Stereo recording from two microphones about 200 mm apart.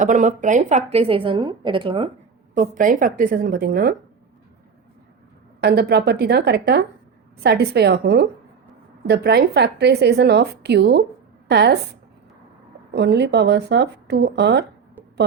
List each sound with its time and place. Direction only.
0.0 s a woman's voice: 40° right (ahead or behind)
2.6 s a woman's voice: 40° right (ahead or behind)
5.5 s a woman's voice: 55° right (ahead or behind)
12.9 s a woman's voice: 55° right (ahead or behind)